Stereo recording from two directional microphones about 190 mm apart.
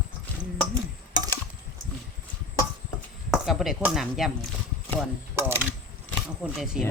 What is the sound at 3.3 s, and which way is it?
Speech, centre (ahead or behind).